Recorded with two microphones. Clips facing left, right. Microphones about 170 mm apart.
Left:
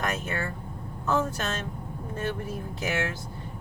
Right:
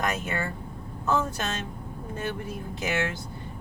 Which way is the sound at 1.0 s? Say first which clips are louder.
Even; 15° right (ahead or behind).